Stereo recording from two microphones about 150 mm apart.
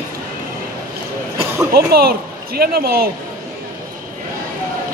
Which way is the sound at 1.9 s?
90° right.